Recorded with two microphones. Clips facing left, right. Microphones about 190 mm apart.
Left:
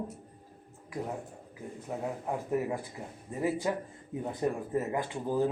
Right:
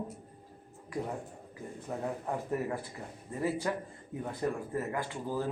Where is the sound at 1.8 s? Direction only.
10° left (ahead or behind).